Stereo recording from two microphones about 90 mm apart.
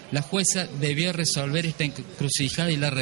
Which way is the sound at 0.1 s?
15° right (ahead or behind).